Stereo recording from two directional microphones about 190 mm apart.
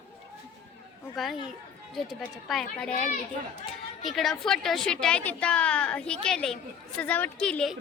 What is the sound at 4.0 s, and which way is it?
A woman's voice, centre (ahead or behind).